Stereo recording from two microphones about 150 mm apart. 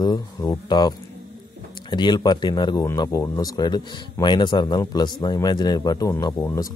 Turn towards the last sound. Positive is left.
turn(degrees=20)  # may be behind; listen again after turning